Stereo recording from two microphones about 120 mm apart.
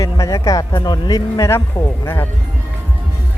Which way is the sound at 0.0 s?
25° left (ahead or behind).